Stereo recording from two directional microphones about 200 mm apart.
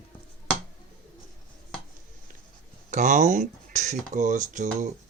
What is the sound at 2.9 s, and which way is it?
Speech, 40° right (ahead or behind).